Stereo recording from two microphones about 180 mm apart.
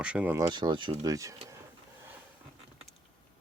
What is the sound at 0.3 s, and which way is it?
Speech, 20° right (ahead or behind).